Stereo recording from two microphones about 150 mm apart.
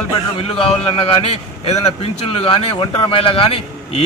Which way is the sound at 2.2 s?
40° left (ahead or behind).